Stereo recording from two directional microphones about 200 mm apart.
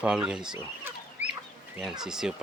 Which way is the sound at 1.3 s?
5° right (ahead or behind).